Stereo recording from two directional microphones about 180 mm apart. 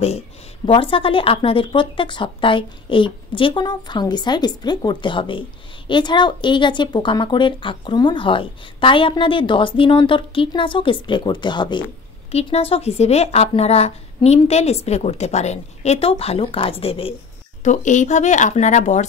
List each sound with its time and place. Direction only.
0.7 s a woman's voice: 30° left (ahead or behind)
12.3 s speech: 35° left (ahead or behind)
17.6 s speech: 40° left (ahead or behind)